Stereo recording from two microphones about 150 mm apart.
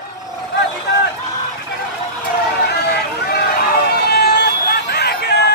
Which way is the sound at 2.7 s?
90° left.